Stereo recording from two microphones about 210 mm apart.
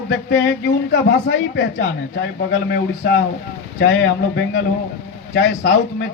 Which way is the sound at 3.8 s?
60° left (ahead or behind).